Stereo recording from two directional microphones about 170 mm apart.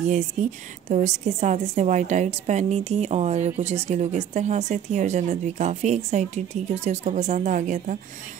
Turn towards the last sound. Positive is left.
turn(degrees=-45)  # may be behind; listen again after turning